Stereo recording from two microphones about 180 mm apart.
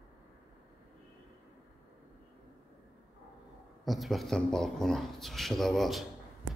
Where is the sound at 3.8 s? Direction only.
Centre (ahead or behind).